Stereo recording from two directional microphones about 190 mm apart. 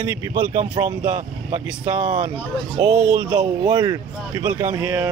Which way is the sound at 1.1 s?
40° right (ahead or behind).